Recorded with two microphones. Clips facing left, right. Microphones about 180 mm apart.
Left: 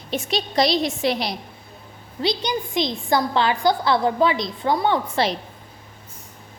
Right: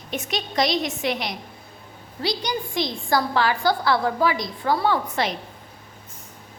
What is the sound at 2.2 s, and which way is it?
A woman's voice, 20° left (ahead or behind).